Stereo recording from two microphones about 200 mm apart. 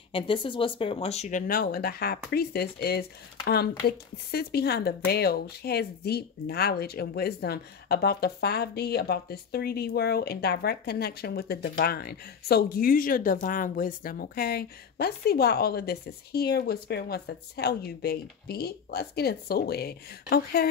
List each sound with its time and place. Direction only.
0.1 s speech: 25° left (ahead or behind)
1.5 s speech: 50° left (ahead or behind)